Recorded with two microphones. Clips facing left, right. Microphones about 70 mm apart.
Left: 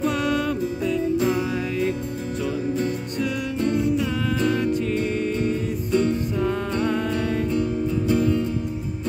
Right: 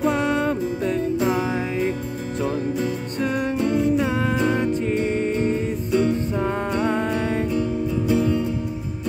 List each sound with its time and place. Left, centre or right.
0.0 s music: right
3.5 s music: right
5.9 s music: centre
8.1 s music: centre